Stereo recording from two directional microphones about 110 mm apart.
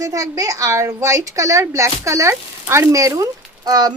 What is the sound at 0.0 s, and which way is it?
A woman's voice, 30° right (ahead or behind).